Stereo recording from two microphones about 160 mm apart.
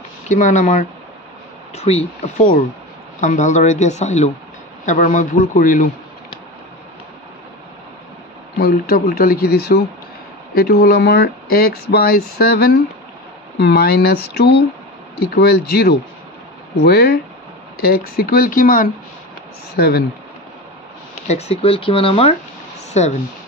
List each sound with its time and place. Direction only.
0.3 s speech: 50° left (ahead or behind)
2.2 s speech: 50° left (ahead or behind)
8.5 s speech: 70° left (ahead or behind)
13.6 s speech: 85° left; by 18.9 s 60° left (ahead or behind)
19.8 s speech: 85° left
21.3 s speech: 40° left (ahead or behind)